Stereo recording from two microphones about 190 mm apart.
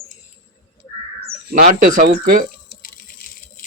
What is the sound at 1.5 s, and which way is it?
Speech, 45° right (ahead or behind).